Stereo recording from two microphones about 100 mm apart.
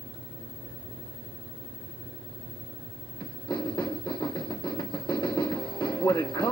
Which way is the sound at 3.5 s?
50° left (ahead or behind).